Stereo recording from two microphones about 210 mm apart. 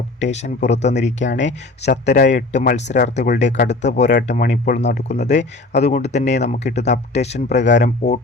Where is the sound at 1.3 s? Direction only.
60° left (ahead or behind).